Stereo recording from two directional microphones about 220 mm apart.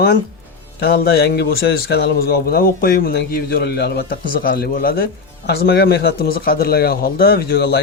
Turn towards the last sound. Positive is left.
turn(degrees=45)  # may be behind; listen again after turning